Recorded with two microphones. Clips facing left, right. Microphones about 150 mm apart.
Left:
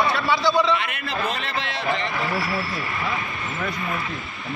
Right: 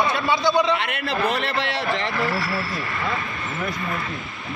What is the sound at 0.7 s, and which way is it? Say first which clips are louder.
A man's voice: right 3 dB; 65° right (ahead or behind).